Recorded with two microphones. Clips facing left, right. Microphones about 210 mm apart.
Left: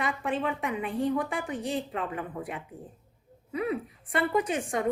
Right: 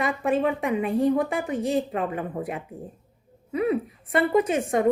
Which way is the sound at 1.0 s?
45° right (ahead or behind).